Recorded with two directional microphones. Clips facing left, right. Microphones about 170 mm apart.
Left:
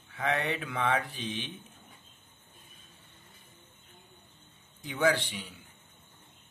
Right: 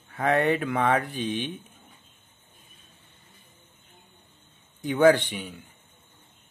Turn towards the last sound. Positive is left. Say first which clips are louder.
# right 6 dB
turn(degrees=-50)  # may be behind; listen again after turning